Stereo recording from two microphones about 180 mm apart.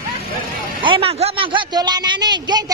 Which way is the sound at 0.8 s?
30° right (ahead or behind).